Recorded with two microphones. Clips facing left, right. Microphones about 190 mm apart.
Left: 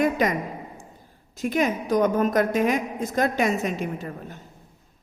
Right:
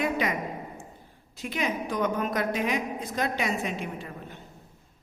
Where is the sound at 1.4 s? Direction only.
45° left (ahead or behind).